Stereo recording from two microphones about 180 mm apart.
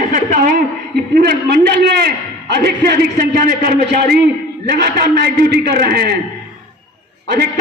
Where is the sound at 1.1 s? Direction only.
65° right (ahead or behind).